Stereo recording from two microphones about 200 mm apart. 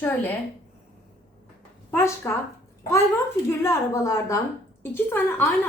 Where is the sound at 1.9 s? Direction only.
15° left (ahead or behind).